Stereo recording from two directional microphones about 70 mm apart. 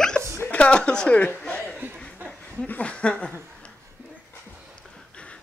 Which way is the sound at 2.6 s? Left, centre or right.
Centre.